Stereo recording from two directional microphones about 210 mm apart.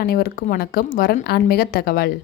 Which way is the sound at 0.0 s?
45° left (ahead or behind).